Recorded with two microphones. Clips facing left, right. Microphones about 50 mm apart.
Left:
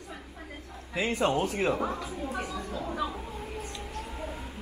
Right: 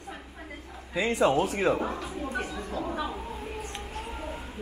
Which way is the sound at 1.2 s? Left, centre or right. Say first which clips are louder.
Right 4 dB; right.